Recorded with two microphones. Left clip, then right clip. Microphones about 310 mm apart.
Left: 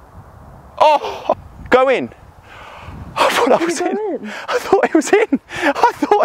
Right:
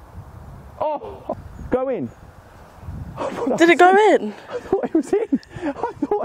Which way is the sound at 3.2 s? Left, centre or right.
Centre.